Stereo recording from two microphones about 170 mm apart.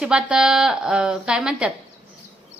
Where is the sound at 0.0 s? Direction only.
5° right (ahead or behind).